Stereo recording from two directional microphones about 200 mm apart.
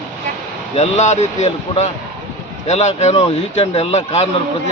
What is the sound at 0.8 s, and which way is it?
Speech, 35° left (ahead or behind).